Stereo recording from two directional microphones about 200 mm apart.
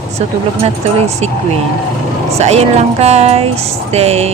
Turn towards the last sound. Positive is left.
turn(degrees=-30)  # may be behind; listen again after turning